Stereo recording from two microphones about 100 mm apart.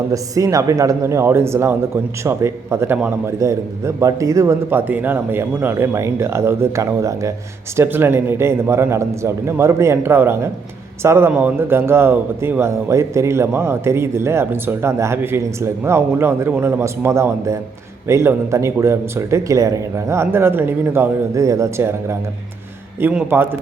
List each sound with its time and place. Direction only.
0.1 s a man's voice: 35° right (ahead or behind)
4.7 s a man's voice: 20° right (ahead or behind)
7.8 s a man's voice: 20° right (ahead or behind)
23.3 s a man's voice: 20° right (ahead or behind)